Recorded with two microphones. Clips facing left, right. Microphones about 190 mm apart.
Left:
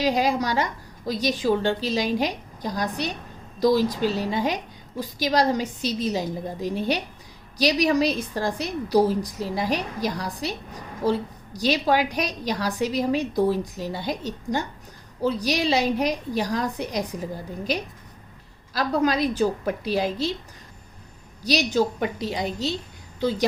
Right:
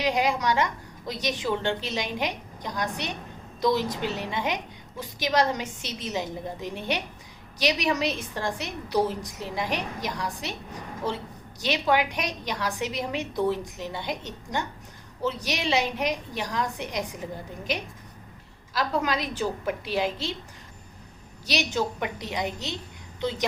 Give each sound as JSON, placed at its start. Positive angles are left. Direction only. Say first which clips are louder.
{"t": 0.0, "sound": "a woman's voice", "louder": "left 3 dB", "side_deg": 35}
{"t": 21.4, "sound": "a woman's voice", "louder": "left 5 dB", "side_deg": 35}